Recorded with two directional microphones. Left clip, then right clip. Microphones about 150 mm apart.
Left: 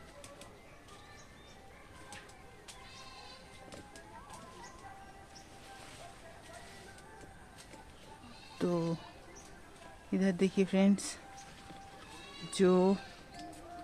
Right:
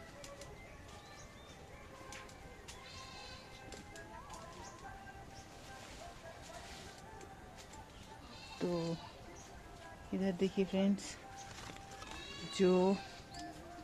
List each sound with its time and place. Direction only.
8.6 s speech: 65° left (ahead or behind)
10.1 s speech: 50° left (ahead or behind)
12.5 s speech: 30° left (ahead or behind)